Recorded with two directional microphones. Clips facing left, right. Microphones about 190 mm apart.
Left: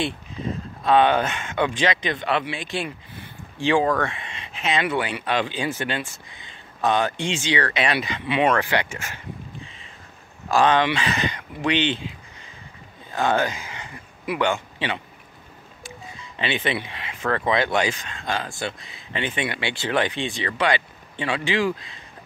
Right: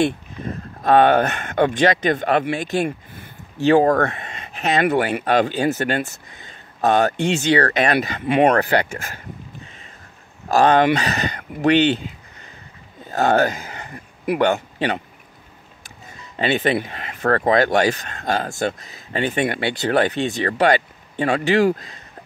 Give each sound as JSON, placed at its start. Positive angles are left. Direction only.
{"t": 0.0, "sound": "speech", "side_deg": -55}
{"t": 1.8, "sound": "speech", "side_deg": -45}
{"t": 10.5, "sound": "speech", "side_deg": -45}
{"t": 13.1, "sound": "a man's voice", "side_deg": -40}
{"t": 16.1, "sound": "speech", "side_deg": -45}